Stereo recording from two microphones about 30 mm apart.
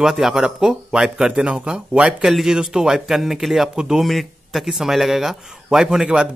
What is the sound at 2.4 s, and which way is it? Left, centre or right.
Speech, centre.